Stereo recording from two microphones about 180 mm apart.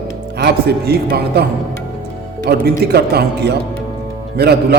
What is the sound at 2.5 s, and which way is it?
Mantra, 65° right (ahead or behind).